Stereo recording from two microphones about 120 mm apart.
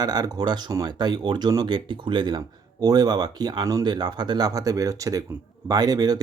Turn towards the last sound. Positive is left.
turn(degrees=-30)  # may be behind; listen again after turning